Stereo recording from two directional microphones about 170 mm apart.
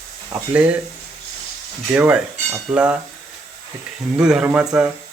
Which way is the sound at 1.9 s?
10° right (ahead or behind).